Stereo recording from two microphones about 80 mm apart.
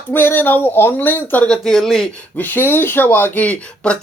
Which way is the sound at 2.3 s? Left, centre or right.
Left.